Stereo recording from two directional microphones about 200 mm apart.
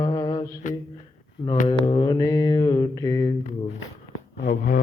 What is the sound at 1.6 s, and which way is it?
Mantra, 20° left (ahead or behind).